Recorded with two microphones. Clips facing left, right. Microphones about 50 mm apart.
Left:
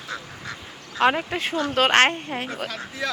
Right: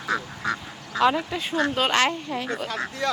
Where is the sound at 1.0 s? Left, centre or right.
Left.